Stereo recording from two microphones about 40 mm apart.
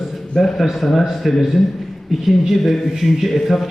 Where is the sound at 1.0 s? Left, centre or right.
Centre.